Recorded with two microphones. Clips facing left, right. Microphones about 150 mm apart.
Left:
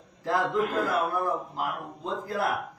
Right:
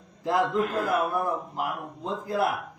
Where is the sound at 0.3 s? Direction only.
20° right (ahead or behind).